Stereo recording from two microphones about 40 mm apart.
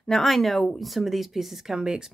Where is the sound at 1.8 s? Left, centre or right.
Centre.